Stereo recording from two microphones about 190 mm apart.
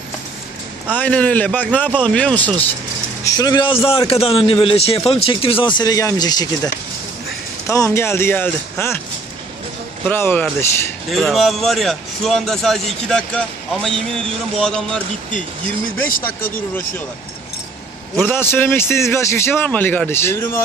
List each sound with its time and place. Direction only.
0.9 s a man's voice: 10° left (ahead or behind)
3.2 s a man's voice: 20° left (ahead or behind)
7.7 s a man's voice: 15° left (ahead or behind)
10.1 s a man's voice: 10° left (ahead or behind)
11.1 s a man's voice: centre (ahead or behind)
14.6 s a man's voice: 5° left (ahead or behind)
16.2 s a man's voice: 10° left (ahead or behind)
18.2 s a man's voice: 10° left (ahead or behind)